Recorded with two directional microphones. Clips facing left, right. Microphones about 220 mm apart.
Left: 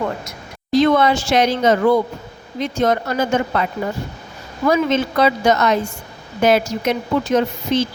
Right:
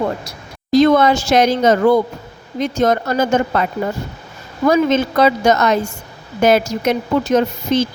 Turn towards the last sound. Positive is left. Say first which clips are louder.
# right 2 dB
turn(degrees=-45)  # may be behind; listen again after turning